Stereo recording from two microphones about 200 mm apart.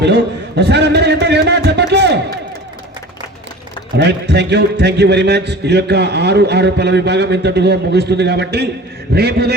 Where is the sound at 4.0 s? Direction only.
55° right (ahead or behind).